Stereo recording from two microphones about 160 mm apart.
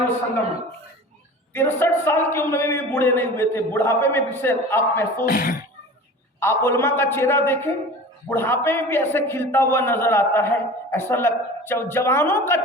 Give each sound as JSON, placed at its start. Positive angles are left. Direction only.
{"t": 1.5, "sound": "a man's voice", "side_deg": 15}
{"t": 5.2, "sound": "speech", "side_deg": 60}
{"t": 6.4, "sound": "a man's voice", "side_deg": 15}